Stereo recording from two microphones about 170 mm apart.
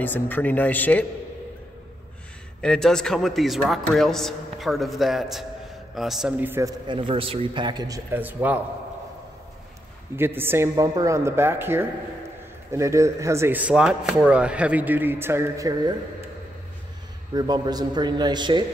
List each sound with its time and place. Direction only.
0.0 s speech: 10° left (ahead or behind)
2.6 s a man's voice: 5° left (ahead or behind); by 6.7 s 10° right (ahead or behind)
6.9 s speech: 30° right (ahead or behind); by 8.5 s 10° right (ahead or behind)
10.1 s speech: 15° right (ahead or behind)
17.3 s speech: 25° right (ahead or behind)